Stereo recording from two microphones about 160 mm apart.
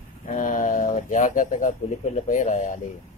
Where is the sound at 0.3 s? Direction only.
55° left (ahead or behind).